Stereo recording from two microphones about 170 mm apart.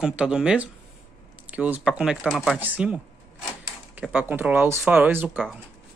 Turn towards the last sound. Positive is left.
turn(degrees=-10)  # may be behind; listen again after turning